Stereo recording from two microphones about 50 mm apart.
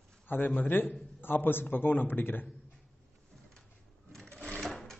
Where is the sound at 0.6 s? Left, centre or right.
Left.